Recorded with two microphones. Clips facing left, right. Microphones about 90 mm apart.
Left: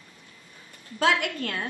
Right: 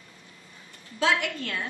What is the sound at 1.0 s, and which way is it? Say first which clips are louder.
Speech: left 1 dB; 50° left (ahead or behind).